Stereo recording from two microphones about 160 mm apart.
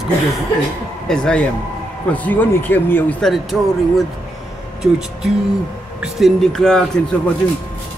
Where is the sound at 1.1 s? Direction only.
5° left (ahead or behind).